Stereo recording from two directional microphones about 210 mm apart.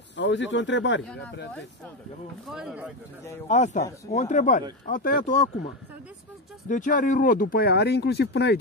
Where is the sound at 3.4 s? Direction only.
35° left (ahead or behind).